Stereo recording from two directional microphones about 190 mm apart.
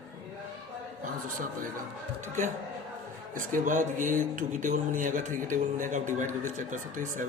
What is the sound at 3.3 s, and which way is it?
Speech, 45° right (ahead or behind).